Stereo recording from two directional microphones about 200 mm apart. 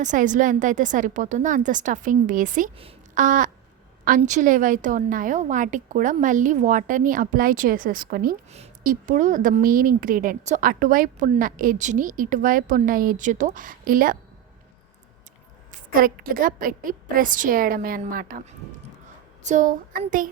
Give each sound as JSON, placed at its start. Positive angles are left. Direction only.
{"t": 0.0, "sound": "a woman's voice", "side_deg": -40}
{"t": 2.7, "sound": "a sound", "side_deg": -30}
{"t": 3.2, "sound": "a woman's voice", "side_deg": -40}
{"t": 15.7, "sound": "a woman's voice", "side_deg": -45}